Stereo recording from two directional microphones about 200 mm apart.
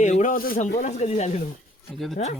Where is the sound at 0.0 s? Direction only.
40° left (ahead or behind).